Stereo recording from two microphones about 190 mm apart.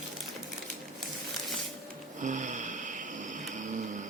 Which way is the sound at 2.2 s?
40° right (ahead or behind).